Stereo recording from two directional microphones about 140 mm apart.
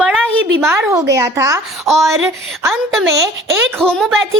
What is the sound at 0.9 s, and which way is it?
Speech, 25° right (ahead or behind).